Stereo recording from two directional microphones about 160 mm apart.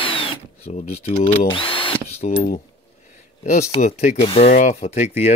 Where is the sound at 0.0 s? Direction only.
35° left (ahead or behind).